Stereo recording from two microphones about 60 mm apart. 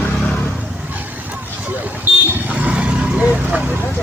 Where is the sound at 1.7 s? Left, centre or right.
Right.